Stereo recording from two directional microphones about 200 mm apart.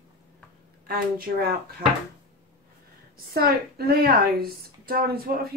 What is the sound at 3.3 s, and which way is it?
A woman's voice, 50° right (ahead or behind).